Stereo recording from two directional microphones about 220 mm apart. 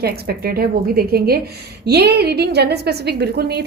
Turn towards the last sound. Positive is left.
turn(degrees=-45)  # may be behind; listen again after turning